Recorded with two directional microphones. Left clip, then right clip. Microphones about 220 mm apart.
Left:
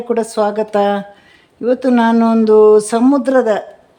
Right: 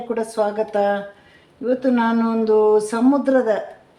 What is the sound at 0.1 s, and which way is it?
A woman's voice, 50° left (ahead or behind).